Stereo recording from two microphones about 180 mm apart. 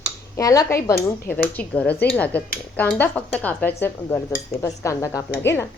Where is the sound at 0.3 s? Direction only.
20° left (ahead or behind).